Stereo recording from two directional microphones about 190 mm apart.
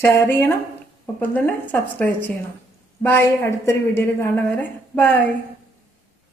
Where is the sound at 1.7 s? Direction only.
10° left (ahead or behind).